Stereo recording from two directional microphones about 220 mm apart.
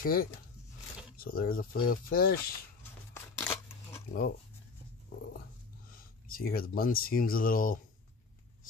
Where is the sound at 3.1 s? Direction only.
10° left (ahead or behind).